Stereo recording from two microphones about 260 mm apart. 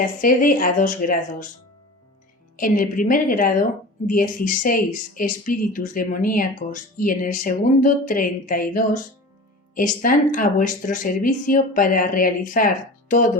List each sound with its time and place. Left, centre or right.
0.0 s a woman's voice: left
2.6 s a woman's voice: left